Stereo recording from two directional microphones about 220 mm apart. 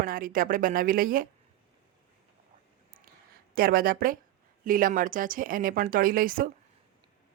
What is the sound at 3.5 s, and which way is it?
A woman's voice, 40° right (ahead or behind).